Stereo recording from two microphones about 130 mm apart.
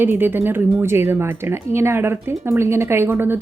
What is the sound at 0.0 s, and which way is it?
A woman's voice, 15° right (ahead or behind).